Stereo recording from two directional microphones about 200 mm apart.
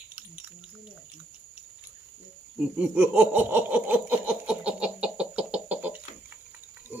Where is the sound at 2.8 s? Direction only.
5° right (ahead or behind).